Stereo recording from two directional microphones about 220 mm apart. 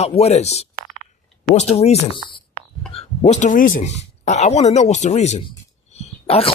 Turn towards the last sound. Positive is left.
turn(degrees=25)  # may be behind; listen again after turning